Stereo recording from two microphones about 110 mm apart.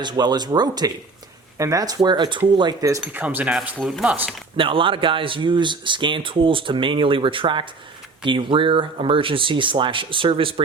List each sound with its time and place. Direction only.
0.0 s speech: 40° right (ahead or behind)
3.1 s speech: 15° right (ahead or behind)
4.5 s a man's voice: 55° right (ahead or behind)